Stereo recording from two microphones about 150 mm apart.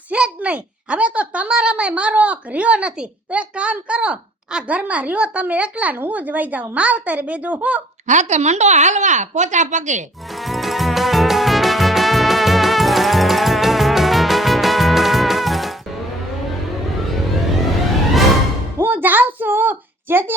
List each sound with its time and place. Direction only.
0.1 s a child's voice: 10° right (ahead or behind)
8.0 s a woman's voice: 55° right (ahead or behind)
10.4 s music: centre (ahead or behind)
18.8 s speech: 15° right (ahead or behind)